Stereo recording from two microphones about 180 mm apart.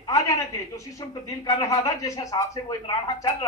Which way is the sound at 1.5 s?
20° left (ahead or behind).